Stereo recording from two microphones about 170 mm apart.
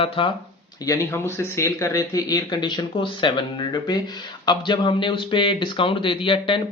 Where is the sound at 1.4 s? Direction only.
15° left (ahead or behind).